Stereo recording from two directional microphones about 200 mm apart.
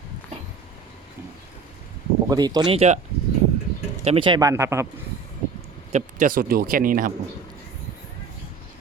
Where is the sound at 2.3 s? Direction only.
20° right (ahead or behind).